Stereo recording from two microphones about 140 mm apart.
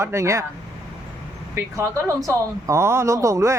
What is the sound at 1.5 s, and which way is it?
Speech, 20° right (ahead or behind).